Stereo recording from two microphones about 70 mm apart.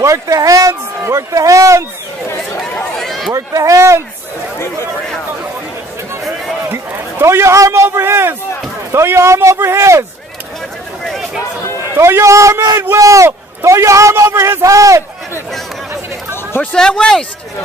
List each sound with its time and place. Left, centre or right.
0.0 s a man's voice: right
2.8 s run: centre
3.3 s a man's voice: right
6.6 s a man's voice: right
12.0 s a man's voice: right
16.7 s speech: centre